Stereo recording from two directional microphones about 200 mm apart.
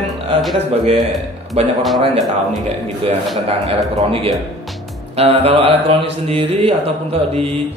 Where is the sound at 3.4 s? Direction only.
30° right (ahead or behind).